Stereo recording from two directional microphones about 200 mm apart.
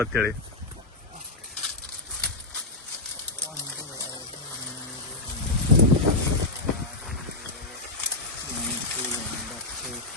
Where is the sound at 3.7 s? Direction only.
15° left (ahead or behind).